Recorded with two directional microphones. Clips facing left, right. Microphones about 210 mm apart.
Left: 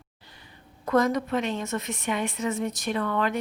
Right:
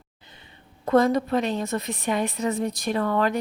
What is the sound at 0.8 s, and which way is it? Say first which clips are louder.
A woman's voice: right 3 dB; 30° right (ahead or behind).